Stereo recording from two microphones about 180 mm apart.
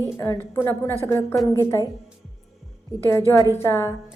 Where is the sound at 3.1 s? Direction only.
15° left (ahead or behind).